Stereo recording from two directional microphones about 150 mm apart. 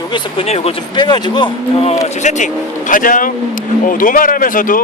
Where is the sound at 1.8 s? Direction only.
45° left (ahead or behind).